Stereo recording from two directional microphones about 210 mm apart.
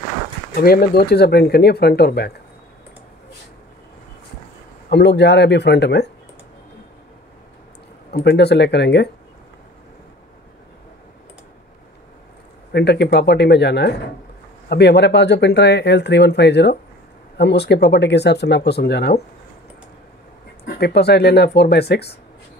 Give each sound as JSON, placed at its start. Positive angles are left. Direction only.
{"t": 0.6, "sound": "speech", "side_deg": 45}
{"t": 4.8, "sound": "speech", "side_deg": 55}
{"t": 8.1, "sound": "speech", "side_deg": 50}
{"t": 12.7, "sound": "speech", "side_deg": 50}
{"t": 20.6, "sound": "speech", "side_deg": 50}